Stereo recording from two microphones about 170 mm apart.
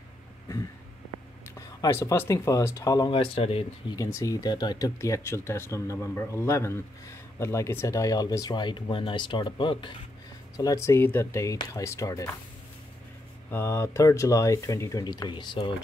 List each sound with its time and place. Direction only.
1.6 s speech: 20° left (ahead or behind); by 3.6 s 35° left (ahead or behind)
3.9 s speech: 20° left (ahead or behind)
10.6 s speech: 20° left (ahead or behind)
13.5 s speech: 15° left (ahead or behind)